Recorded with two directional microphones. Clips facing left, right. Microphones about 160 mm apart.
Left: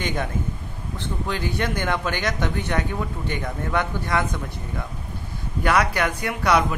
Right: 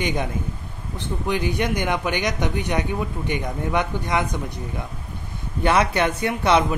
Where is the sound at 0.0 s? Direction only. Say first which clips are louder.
Right 2 dB; 15° right (ahead or behind).